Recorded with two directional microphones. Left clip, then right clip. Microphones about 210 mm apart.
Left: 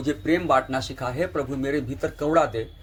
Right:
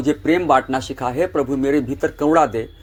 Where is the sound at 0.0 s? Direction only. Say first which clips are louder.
Right 6 dB; 30° right (ahead or behind).